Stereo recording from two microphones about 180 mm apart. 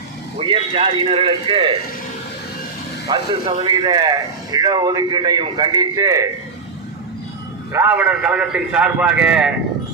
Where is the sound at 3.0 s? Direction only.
25° right (ahead or behind).